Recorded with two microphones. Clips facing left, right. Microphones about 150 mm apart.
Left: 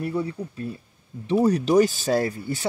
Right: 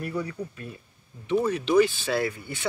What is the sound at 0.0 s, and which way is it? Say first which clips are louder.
Speech: left 4 dB; 30° left (ahead or behind).